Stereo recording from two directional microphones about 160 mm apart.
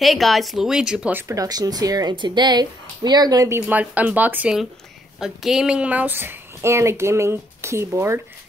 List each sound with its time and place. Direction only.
0.0 s speech: centre (ahead or behind)
1.2 s speech: 20° right (ahead or behind)